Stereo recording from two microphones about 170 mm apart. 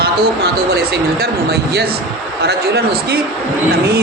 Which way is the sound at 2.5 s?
70° right (ahead or behind).